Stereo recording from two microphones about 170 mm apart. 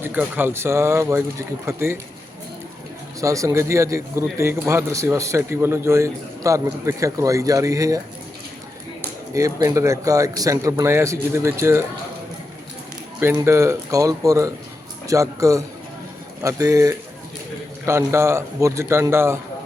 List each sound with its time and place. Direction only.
0.0 s speech: 10° right (ahead or behind)
3.2 s speech: 20° right (ahead or behind)
9.3 s speech: 20° right (ahead or behind)
13.1 s speech: 15° right (ahead or behind)